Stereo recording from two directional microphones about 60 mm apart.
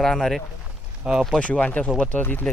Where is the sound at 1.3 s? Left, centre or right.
Centre.